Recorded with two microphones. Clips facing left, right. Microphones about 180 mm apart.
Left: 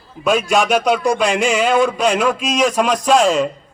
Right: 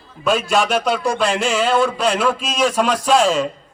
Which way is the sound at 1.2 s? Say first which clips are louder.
Left 2 dB; 5° right (ahead or behind).